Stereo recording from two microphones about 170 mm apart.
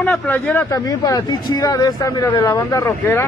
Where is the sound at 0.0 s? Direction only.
10° left (ahead or behind).